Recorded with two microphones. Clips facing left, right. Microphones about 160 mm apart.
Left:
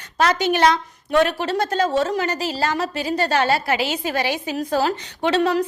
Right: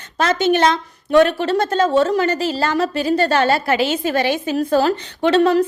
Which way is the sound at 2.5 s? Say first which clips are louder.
Right 4 dB; 55° right (ahead or behind).